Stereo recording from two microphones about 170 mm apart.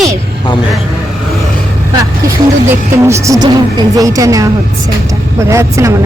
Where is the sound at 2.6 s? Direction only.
15° right (ahead or behind).